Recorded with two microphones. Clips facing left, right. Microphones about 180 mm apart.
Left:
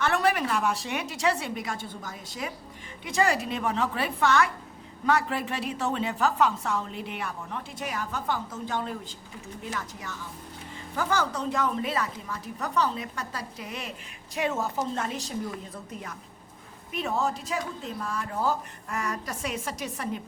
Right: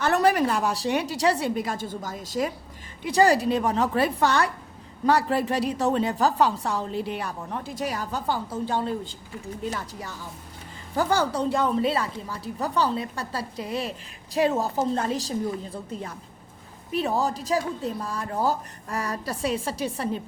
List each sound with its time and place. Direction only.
0.0 s a woman's voice: 40° right (ahead or behind)